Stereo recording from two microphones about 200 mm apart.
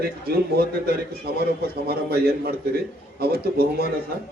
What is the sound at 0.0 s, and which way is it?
A man's voice, 50° right (ahead or behind).